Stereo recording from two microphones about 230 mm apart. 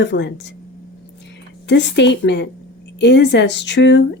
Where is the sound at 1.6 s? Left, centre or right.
Left.